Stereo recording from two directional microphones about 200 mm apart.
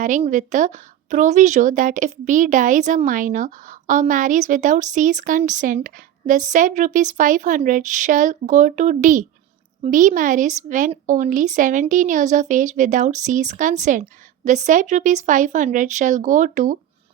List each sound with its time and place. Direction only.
0.0 s a woman's voice: 40° right (ahead or behind)